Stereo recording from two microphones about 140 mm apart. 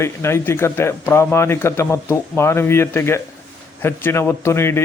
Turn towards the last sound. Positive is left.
turn(degrees=20)  # may be behind; listen again after turning